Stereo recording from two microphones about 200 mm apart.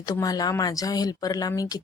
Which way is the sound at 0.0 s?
20° left (ahead or behind).